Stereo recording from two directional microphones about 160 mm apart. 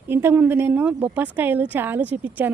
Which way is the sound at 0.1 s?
15° right (ahead or behind).